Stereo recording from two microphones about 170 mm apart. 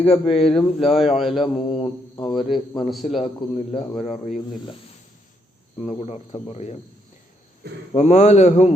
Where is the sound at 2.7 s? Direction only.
Centre (ahead or behind).